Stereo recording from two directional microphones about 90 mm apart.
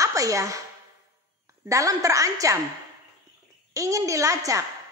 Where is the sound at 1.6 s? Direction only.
40° right (ahead or behind).